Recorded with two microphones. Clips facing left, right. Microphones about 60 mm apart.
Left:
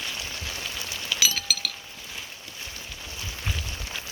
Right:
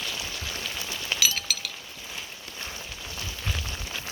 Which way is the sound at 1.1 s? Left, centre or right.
Right.